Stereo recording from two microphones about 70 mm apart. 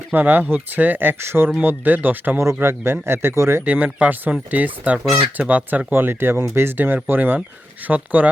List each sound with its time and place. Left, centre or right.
0.1 s speech: right
3.7 s speech: centre
5.9 s speech: right